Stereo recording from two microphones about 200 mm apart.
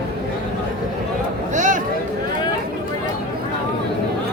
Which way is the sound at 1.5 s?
40° right (ahead or behind).